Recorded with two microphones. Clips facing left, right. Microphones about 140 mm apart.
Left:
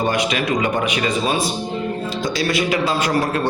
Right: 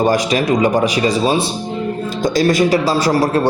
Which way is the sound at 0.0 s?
40° right (ahead or behind).